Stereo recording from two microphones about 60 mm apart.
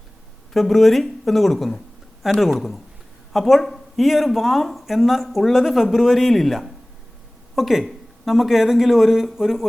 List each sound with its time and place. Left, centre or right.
0.5 s speech: centre